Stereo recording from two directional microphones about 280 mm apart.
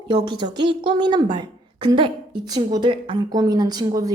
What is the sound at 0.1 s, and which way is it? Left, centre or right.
A woman's voice, centre.